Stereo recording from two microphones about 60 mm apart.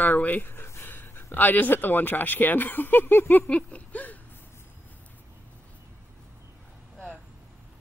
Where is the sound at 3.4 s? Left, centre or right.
Left.